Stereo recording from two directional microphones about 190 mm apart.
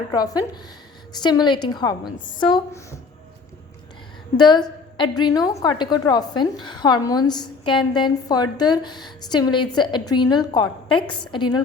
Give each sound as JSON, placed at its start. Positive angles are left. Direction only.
{"t": 0.1, "sound": "a woman's voice", "side_deg": 20}
{"t": 4.4, "sound": "a woman's voice", "side_deg": 25}